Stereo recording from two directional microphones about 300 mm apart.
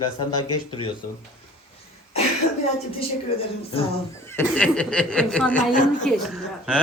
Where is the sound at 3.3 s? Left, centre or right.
Centre.